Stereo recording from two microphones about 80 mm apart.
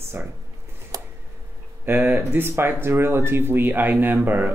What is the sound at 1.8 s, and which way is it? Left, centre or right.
Speech, right.